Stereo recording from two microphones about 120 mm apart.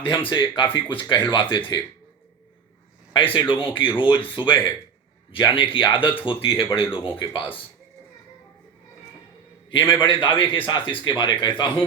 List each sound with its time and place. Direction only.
0.3 s a man's voice: 45° left (ahead or behind)
3.3 s a man's voice: 45° left (ahead or behind)
9.6 s a man's voice: 40° left (ahead or behind)